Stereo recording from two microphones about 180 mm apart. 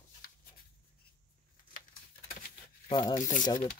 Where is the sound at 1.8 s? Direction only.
45° left (ahead or behind).